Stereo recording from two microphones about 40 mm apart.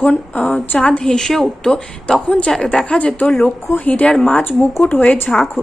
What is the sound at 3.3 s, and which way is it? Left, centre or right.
Speech, centre.